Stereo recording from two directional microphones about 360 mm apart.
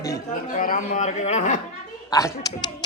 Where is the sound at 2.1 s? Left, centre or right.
Centre.